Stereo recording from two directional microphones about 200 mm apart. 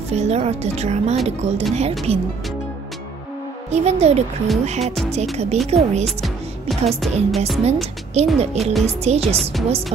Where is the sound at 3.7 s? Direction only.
30° right (ahead or behind).